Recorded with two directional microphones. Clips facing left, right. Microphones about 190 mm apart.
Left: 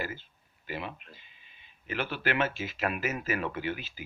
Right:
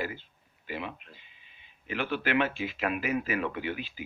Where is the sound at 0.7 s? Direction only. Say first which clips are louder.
Right 1 dB; 40° left (ahead or behind).